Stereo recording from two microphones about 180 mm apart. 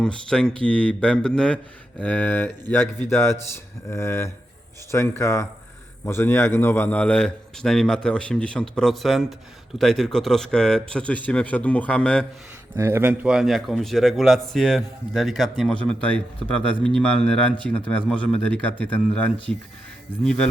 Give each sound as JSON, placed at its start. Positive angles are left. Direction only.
{"t": 0.0, "sound": "a man's voice", "side_deg": 5}
{"t": 12.7, "sound": "a man's voice", "side_deg": -15}